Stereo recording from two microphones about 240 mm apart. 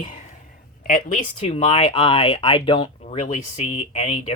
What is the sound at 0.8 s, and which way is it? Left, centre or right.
Speech, left.